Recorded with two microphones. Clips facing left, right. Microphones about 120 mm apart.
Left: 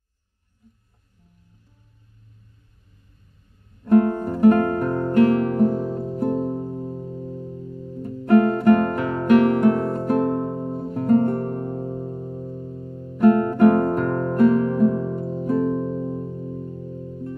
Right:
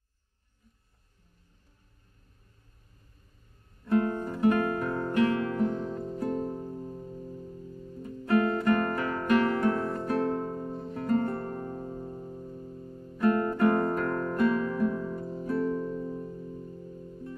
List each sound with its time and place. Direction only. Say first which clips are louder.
3.8 s music: left 9 dB; 45° left (ahead or behind)
6.2 s music: left 8 dB; 20° left (ahead or behind)
6.6 s music: left 8 dB; 40° left (ahead or behind)